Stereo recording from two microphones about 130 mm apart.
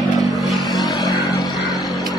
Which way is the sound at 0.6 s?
30° left (ahead or behind).